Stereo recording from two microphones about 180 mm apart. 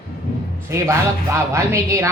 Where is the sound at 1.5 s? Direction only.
15° right (ahead or behind).